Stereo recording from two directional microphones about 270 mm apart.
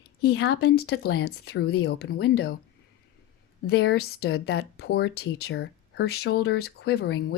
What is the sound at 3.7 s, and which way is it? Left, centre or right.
Speech, left.